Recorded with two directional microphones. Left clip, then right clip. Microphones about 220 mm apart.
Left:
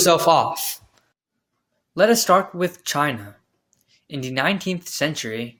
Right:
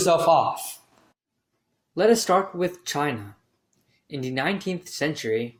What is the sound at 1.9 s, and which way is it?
Speech, 40° left (ahead or behind).